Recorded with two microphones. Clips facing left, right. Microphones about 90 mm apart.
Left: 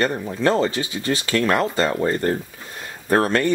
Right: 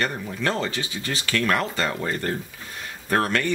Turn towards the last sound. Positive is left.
turn(degrees=30)  # may be behind; listen again after turning